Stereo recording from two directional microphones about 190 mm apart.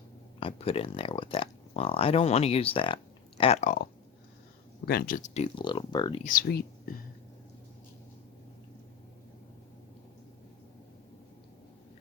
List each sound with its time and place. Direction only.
0.3 s speech: 30° left (ahead or behind)
4.9 s speech: 50° left (ahead or behind); by 6.2 s 25° left (ahead or behind)
6.2 s speech: 50° left (ahead or behind)